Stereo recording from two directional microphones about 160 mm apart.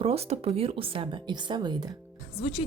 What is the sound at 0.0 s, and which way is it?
Speech, 40° right (ahead or behind).